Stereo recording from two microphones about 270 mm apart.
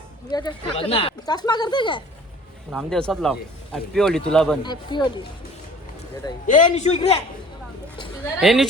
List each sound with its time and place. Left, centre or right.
0.3 s speech: centre
2.7 s speech: centre
4.6 s speech: centre
6.5 s a man's voice: left
8.2 s speech: centre